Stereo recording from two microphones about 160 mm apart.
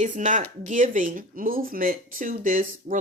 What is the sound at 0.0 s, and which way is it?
Speech, 50° right (ahead or behind).